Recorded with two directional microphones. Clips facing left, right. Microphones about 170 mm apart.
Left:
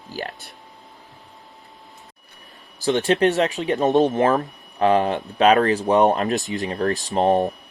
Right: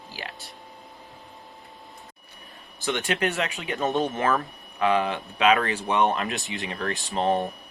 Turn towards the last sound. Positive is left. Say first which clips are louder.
# left 6 dB
turn(degrees=40)  # may be behind; listen again after turning